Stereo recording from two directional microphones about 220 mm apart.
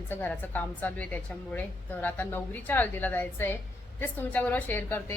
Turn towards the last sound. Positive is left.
turn(degrees=10)  # may be behind; listen again after turning